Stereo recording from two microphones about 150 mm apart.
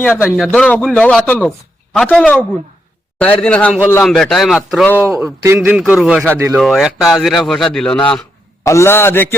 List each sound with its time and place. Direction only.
0.0 s a man's voice: 15° left (ahead or behind)
0.3 s a man's voice: centre (ahead or behind)
5.0 s speech: 20° right (ahead or behind)
5.5 s speech: 5° right (ahead or behind)
6.6 s speech: centre (ahead or behind)
8.6 s a man's voice: 20° left (ahead or behind)